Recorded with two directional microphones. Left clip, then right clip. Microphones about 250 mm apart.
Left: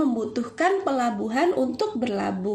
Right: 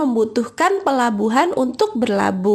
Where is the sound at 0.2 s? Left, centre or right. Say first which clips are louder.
Right 7 dB; right.